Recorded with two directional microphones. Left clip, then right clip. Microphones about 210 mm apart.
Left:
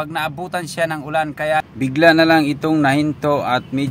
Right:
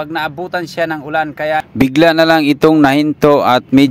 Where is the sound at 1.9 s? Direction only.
50° right (ahead or behind).